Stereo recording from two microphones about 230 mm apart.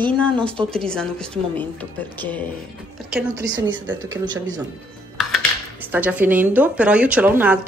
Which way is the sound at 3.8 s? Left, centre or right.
Centre.